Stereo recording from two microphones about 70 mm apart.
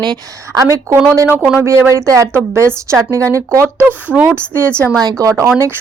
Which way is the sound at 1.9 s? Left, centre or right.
Right.